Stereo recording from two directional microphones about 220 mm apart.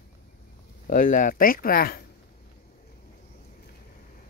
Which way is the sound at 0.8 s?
40° left (ahead or behind).